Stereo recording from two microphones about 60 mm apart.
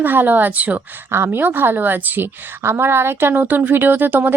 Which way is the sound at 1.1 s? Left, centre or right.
Right.